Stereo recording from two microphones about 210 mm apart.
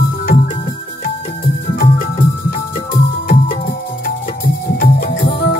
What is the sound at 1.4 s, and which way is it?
Music, 40° left (ahead or behind).